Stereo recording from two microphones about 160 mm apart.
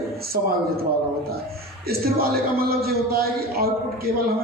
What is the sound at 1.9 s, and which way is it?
Speech, 70° right (ahead or behind).